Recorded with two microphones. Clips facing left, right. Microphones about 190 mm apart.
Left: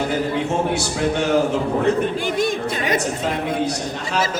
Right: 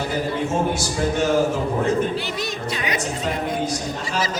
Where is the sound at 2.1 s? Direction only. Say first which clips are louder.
Left 6 dB; 50° left (ahead or behind).